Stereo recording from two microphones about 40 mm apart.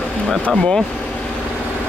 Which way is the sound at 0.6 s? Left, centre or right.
Centre.